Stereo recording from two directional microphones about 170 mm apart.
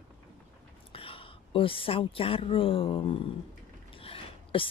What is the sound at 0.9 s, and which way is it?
A woman's voice, 35° left (ahead or behind).